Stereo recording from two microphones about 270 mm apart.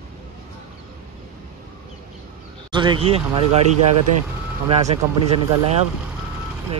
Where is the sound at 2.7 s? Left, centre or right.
Centre.